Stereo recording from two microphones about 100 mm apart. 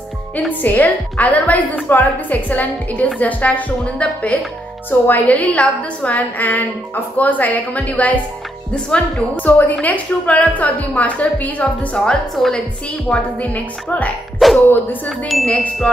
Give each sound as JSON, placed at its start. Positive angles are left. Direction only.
{"t": 0.5, "sound": "a woman's voice", "side_deg": 15}
{"t": 14.4, "sound": "speech", "side_deg": 0}
{"t": 15.0, "sound": "chime", "side_deg": 5}
{"t": 15.5, "sound": "a woman's voice", "side_deg": 10}